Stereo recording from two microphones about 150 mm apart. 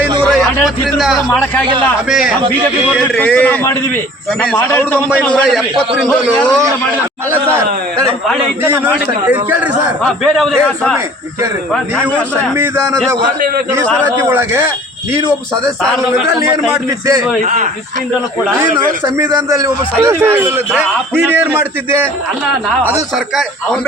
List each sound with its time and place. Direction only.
0.2 s a sound: 5° left (ahead or behind)
2.0 s a man's voice: centre (ahead or behind)
3.2 s a man's voice: 10° left (ahead or behind)
5.2 s a man's voice: centre (ahead or behind)
7.3 s a man's voice: 15° right (ahead or behind)
8.6 s a man's voice: 15° right (ahead or behind)
10.0 s a man's voice: centre (ahead or behind)
12.5 s a man's voice: 20° right (ahead or behind)
14.2 s a man's voice: 15° right (ahead or behind)
15.8 s a man's voice: 5° left (ahead or behind)
17.4 s speech: 55° right (ahead or behind)
18.4 s a man's voice: 15° right (ahead or behind)
23.1 s a man's voice: centre (ahead or behind)